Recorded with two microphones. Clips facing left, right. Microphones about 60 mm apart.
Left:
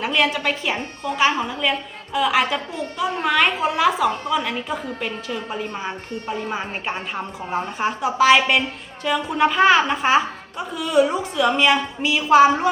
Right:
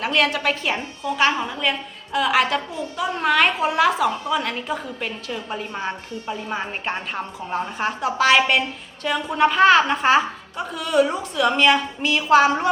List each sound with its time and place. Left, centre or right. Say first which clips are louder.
0.0 s a woman's voice: even; centre
0.8 s a woman's voice: even; left
2.1 s a woman's voice: even; centre